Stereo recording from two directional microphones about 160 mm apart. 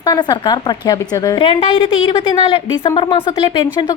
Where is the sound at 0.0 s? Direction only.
25° left (ahead or behind).